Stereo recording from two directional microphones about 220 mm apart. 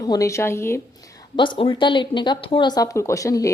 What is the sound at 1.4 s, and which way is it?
A woman's voice, 20° left (ahead or behind).